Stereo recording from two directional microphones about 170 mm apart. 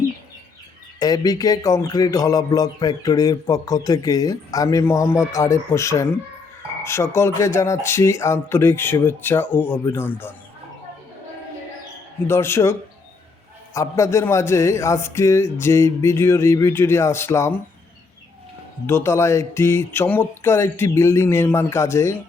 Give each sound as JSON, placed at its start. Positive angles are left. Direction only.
{"t": 0.9, "sound": "a sound", "side_deg": 20}
{"t": 6.8, "sound": "a man's voice", "side_deg": 15}
{"t": 12.3, "sound": "a man's voice", "side_deg": 15}
{"t": 13.7, "sound": "a man's voice", "side_deg": 15}
{"t": 18.9, "sound": "a man's voice", "side_deg": 15}